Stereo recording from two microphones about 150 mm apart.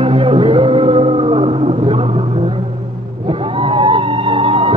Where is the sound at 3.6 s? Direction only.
35° right (ahead or behind).